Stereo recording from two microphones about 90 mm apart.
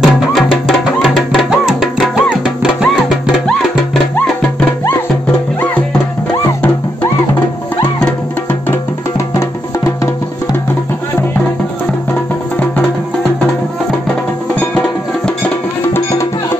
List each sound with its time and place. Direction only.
0.0 s music: 5° right (ahead or behind)
9.3 s music: 30° left (ahead or behind)
12.1 s music: 15° left (ahead or behind)
15.9 s music: 30° left (ahead or behind)